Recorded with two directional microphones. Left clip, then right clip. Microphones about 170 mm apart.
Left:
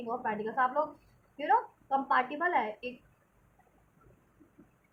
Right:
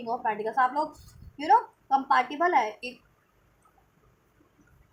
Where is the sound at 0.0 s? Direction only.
30° right (ahead or behind).